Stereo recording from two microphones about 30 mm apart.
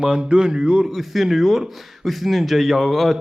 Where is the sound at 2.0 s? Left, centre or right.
Centre.